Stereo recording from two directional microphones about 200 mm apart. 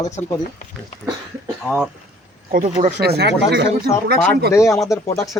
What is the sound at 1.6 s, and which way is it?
Speech, 5° right (ahead or behind).